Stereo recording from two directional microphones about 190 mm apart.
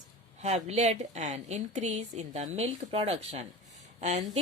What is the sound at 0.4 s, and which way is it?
A woman's voice, 35° right (ahead or behind).